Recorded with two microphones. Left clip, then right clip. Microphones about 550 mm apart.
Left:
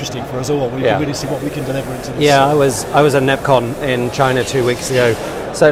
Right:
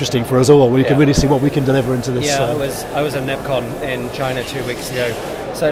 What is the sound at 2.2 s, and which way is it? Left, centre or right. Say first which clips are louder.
Speech: left 9 dB; left.